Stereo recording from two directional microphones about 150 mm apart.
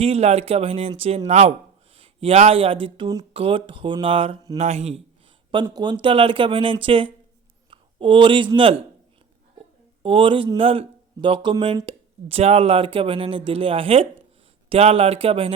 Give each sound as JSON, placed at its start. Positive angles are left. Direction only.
{"t": 0.0, "sound": "speech", "side_deg": -45}
{"t": 4.5, "sound": "speech", "side_deg": -50}
{"t": 5.6, "sound": "speech", "side_deg": -30}
{"t": 10.0, "sound": "speech", "side_deg": -35}